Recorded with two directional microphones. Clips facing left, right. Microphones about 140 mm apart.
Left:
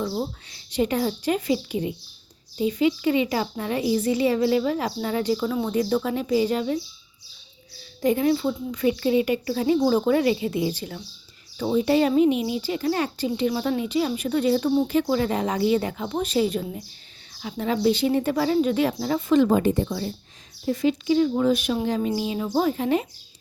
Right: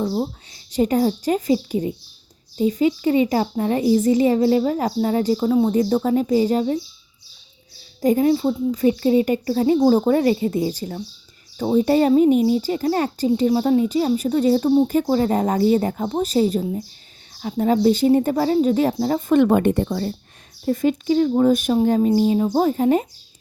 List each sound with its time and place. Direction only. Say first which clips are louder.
0.0 s speech: right 5 dB; 20° right (ahead or behind)
0.7 s a woman's voice: right 5 dB; 40° right (ahead or behind)
8.0 s a woman's voice: right 4 dB; 40° right (ahead or behind)
8.3 s a woman's voice: right 5 dB; 30° right (ahead or behind)
9.7 s a woman's voice: right 4 dB; 30° right (ahead or behind)
17.4 s a woman's voice: right 5 dB; 40° right (ahead or behind)
19.3 s speech: right 3 dB; 60° right (ahead or behind); by 23.0 s 40° right (ahead or behind)